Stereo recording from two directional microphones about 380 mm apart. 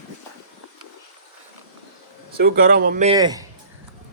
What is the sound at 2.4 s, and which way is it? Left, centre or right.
Speech, right.